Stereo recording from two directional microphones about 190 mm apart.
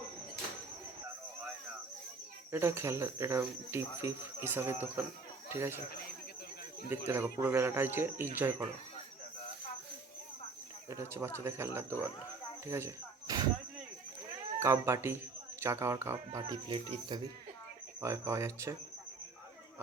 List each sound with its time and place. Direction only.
2.5 s speech: 15° right (ahead or behind)
6.8 s speech: 10° right (ahead or behind)
10.8 s speech: 15° right (ahead or behind)
12.7 s cricket: 15° right (ahead or behind)
14.6 s speech: 15° right (ahead or behind)
16.4 s speech: 25° right (ahead or behind)
18.0 s speech: 15° right (ahead or behind)